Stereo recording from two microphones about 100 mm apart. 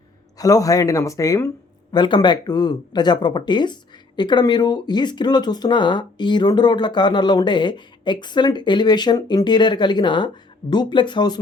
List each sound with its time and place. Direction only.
0.3 s speech: 35° left (ahead or behind)
1.9 s speech: 50° left (ahead or behind)